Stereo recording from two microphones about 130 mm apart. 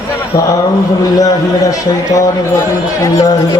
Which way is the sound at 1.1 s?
25° left (ahead or behind).